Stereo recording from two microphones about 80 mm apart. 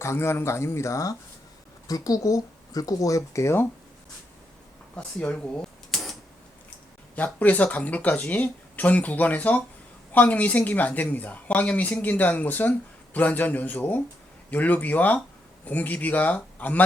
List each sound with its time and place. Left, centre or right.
0.0 s speech: left
4.9 s speech: centre
5.9 s a sound: centre
7.2 s speech: left